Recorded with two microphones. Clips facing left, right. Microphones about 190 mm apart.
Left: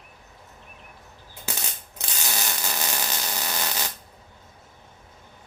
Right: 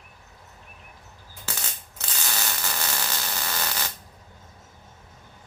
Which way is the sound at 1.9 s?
15° left (ahead or behind).